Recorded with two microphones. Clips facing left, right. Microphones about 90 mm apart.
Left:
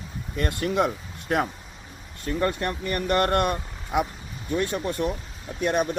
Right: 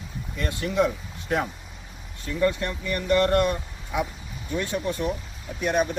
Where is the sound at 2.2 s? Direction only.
45° left (ahead or behind).